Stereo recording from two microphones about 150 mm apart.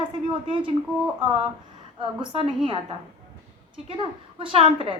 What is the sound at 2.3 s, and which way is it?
Speech, 35° right (ahead or behind).